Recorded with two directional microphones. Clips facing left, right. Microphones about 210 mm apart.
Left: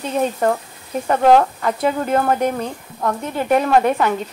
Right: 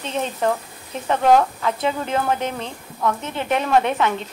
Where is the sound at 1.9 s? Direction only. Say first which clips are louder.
Left 5 dB; 50° left (ahead or behind).